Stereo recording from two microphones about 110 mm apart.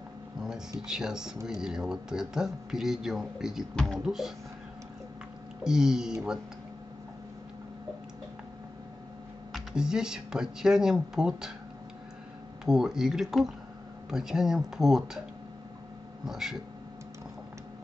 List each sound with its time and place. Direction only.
0.7 s a man's voice: 5° right (ahead or behind)
4.0 s a man's voice: 5° right (ahead or behind)
5.6 s a man's voice: 5° right (ahead or behind)
9.5 s a man's voice: 5° right (ahead or behind)
12.6 s a man's voice: 5° right (ahead or behind)
16.3 s a man's voice: 5° right (ahead or behind)